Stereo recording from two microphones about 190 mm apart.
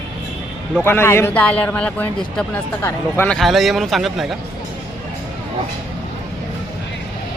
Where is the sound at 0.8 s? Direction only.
10° left (ahead or behind).